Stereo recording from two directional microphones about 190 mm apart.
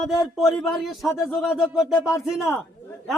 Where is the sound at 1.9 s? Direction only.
15° left (ahead or behind).